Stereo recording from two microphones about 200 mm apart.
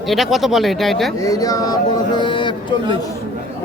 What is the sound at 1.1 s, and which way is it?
Speech, 15° left (ahead or behind).